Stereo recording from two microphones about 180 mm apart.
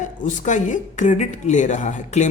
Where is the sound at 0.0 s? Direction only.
45° left (ahead or behind).